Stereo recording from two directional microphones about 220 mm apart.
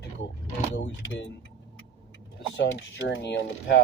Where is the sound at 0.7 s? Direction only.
55° left (ahead or behind).